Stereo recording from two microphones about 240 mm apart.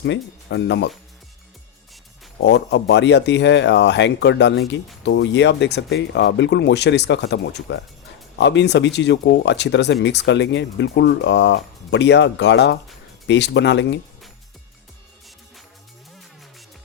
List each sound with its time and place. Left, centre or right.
0.0 s speech: left
2.4 s speech: left